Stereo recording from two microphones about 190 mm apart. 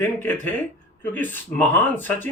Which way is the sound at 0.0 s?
10° left (ahead or behind).